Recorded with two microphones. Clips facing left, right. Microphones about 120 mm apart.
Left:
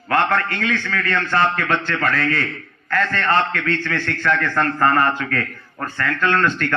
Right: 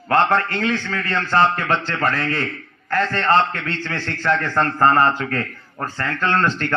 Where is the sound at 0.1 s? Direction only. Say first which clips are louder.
Right 2 dB; 30° right (ahead or behind).